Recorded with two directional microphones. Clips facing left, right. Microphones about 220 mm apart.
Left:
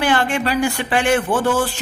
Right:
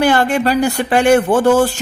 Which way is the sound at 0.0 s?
40° right (ahead or behind).